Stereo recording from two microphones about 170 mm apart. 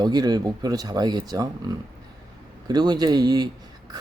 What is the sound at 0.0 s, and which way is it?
Speech, 25° right (ahead or behind).